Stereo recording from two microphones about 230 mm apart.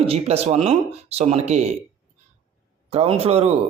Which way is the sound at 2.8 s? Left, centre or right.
Right.